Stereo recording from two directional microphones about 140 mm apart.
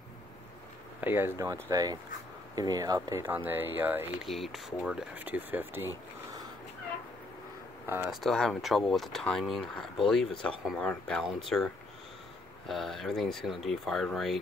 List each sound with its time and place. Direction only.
1.0 s speech: 15° right (ahead or behind)
4.2 s speech: centre (ahead or behind)
7.8 s speech: 15° right (ahead or behind)
8.1 s speech: centre (ahead or behind)